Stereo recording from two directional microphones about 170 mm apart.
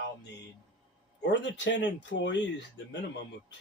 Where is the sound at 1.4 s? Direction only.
90° left.